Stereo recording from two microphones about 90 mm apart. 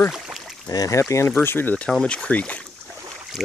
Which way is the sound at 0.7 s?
40° left (ahead or behind).